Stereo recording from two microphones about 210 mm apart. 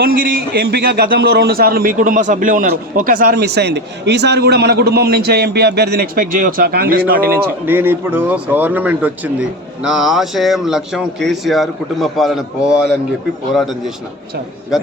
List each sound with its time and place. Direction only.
0.0 s a man's voice: 45° right (ahead or behind)
7.6 s speech: 10° right (ahead or behind)